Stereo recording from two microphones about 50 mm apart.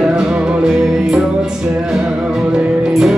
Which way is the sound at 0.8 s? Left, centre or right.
Centre.